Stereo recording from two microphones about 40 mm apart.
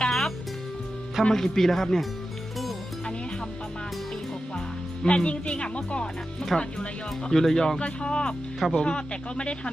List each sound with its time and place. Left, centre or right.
0.0 s music: centre
1.3 s speech: centre
5.0 s speech: left
6.5 s speech: centre
7.8 s speech: left